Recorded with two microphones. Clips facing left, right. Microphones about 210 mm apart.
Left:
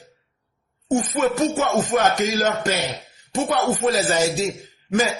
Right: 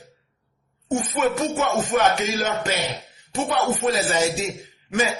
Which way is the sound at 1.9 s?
35° left (ahead or behind).